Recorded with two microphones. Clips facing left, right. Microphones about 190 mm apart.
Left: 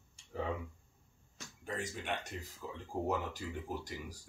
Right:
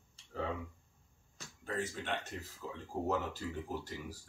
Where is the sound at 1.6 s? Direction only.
15° left (ahead or behind).